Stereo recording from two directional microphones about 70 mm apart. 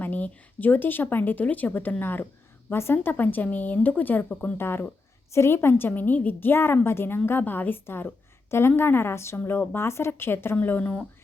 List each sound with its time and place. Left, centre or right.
0.0 s a woman's voice: left